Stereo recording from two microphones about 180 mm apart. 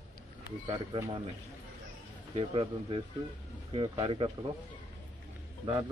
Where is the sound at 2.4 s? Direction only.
30° right (ahead or behind).